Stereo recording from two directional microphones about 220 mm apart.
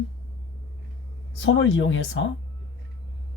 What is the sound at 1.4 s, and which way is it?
Speech, 60° left (ahead or behind).